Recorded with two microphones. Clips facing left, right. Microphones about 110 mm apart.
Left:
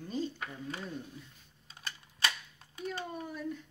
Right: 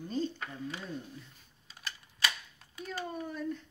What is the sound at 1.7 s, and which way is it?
Camera, 30° left (ahead or behind).